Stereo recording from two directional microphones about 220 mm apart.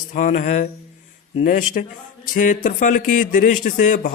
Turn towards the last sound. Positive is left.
turn(degrees=35)  # may be behind; listen again after turning